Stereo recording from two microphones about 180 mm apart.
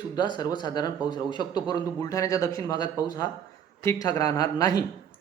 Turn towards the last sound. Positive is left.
turn(degrees=20)  # may be behind; listen again after turning